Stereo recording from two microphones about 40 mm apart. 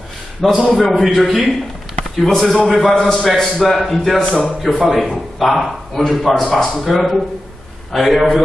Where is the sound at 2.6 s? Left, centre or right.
Centre.